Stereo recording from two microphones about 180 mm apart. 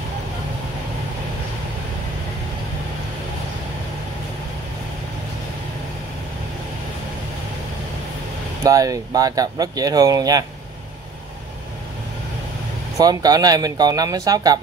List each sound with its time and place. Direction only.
8.6 s speech: 20° right (ahead or behind)
12.9 s speech: 20° right (ahead or behind)